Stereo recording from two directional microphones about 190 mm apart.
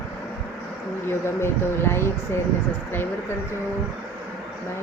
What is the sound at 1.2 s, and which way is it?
Speech, 10° left (ahead or behind).